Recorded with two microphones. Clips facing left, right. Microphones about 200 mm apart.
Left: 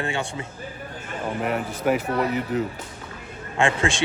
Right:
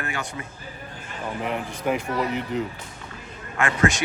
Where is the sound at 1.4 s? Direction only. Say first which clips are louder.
Left 3 dB; 5° left (ahead or behind).